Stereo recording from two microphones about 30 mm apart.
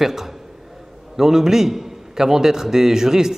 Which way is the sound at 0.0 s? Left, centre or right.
Centre.